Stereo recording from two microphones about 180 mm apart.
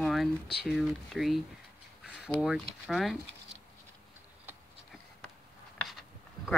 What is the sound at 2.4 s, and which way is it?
Speech, centre (ahead or behind).